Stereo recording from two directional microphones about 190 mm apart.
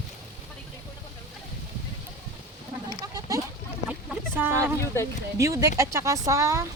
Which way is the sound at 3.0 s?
20° right (ahead or behind).